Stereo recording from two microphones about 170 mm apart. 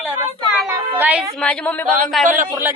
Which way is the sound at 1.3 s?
5° left (ahead or behind).